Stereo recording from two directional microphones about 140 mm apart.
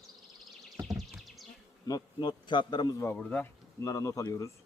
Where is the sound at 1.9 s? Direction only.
30° left (ahead or behind).